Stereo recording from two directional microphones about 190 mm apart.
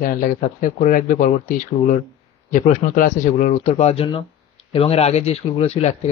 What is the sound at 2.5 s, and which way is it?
Speech, 45° left (ahead or behind).